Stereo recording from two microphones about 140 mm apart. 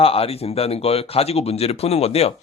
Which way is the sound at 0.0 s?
45° left (ahead or behind).